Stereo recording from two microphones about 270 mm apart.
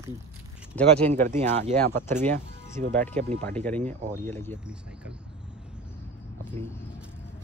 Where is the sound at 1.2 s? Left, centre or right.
Right.